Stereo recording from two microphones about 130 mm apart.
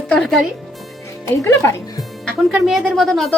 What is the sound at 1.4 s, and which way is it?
Speech, 20° left (ahead or behind).